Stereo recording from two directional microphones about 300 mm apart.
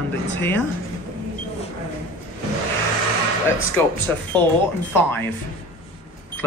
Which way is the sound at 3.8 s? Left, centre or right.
Centre.